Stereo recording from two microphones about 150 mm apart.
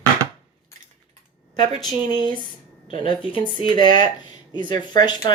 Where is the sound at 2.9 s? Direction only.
35° left (ahead or behind).